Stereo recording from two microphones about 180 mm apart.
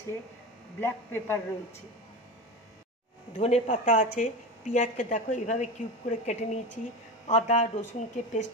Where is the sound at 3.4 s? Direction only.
40° left (ahead or behind).